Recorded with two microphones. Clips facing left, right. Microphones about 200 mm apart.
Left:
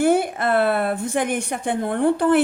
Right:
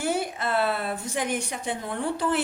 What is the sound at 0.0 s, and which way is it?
A woman's voice, 55° left (ahead or behind).